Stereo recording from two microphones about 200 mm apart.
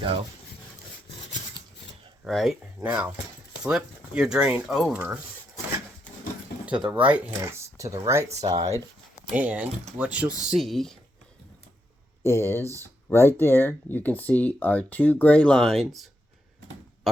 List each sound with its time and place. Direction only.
2.2 s speech: centre (ahead or behind)
6.7 s speech: 5° right (ahead or behind)
12.2 s speech: 10° left (ahead or behind)